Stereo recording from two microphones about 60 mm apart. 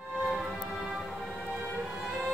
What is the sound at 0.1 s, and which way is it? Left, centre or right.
Music, centre.